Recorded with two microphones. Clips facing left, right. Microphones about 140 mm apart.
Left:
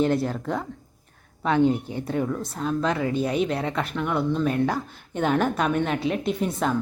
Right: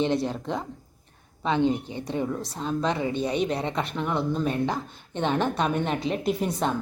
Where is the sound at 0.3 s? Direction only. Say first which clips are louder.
Left 2 dB; 20° right (ahead or behind).